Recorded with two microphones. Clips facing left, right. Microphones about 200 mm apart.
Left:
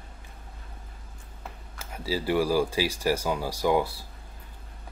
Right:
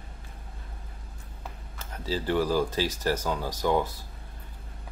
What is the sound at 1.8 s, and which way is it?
Speech, 10° left (ahead or behind).